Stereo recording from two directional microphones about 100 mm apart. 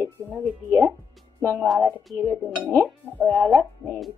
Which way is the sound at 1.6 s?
Centre (ahead or behind).